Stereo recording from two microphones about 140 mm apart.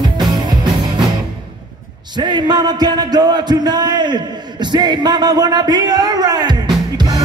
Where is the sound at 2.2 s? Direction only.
35° right (ahead or behind).